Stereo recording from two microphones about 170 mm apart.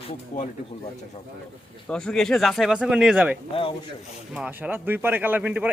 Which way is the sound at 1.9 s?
5° left (ahead or behind).